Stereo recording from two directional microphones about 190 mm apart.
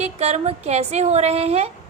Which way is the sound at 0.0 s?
35° right (ahead or behind).